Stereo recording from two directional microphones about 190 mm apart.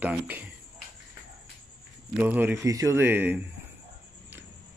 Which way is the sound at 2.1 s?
10° right (ahead or behind).